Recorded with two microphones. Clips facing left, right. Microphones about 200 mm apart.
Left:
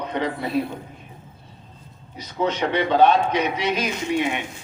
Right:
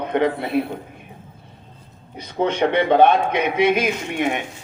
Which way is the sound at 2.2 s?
55° right (ahead or behind).